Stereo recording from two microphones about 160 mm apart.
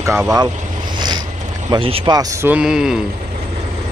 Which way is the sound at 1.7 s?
30° right (ahead or behind).